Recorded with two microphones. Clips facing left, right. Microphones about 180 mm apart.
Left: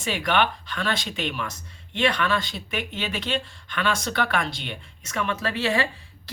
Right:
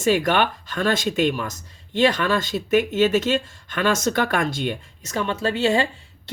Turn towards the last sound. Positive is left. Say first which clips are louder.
# right 2 dB
turn(degrees=-25)  # may be behind; listen again after turning